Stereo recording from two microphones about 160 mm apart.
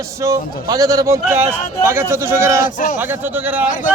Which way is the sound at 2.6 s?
55° left (ahead or behind).